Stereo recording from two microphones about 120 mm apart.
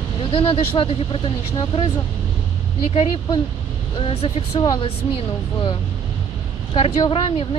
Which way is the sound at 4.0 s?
55° left (ahead or behind).